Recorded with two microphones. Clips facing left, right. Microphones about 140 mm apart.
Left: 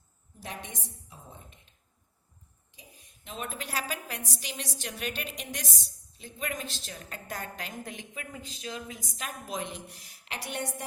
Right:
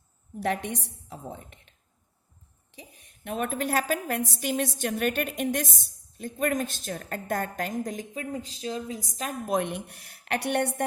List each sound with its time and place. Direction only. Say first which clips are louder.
0.3 s a woman's voice: right 12 dB; 65° right (ahead or behind)
2.7 s a woman's voice: right 7 dB; 60° right (ahead or behind); by 9.3 s 35° right (ahead or behind)
9.5 s a woman's voice: right 11 dB; 60° right (ahead or behind)